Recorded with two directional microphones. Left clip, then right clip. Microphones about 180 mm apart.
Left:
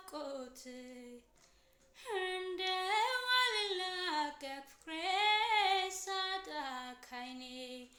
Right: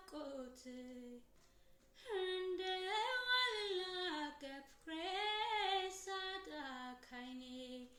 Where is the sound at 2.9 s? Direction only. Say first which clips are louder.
Left 5 dB; 20° right (ahead or behind).